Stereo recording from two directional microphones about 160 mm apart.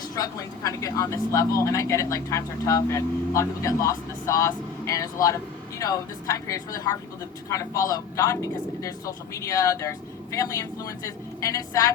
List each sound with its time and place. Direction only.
0.2 s speech: 20° left (ahead or behind)